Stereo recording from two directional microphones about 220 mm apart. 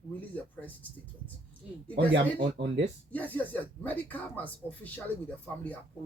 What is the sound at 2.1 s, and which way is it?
Speech, 55° right (ahead or behind).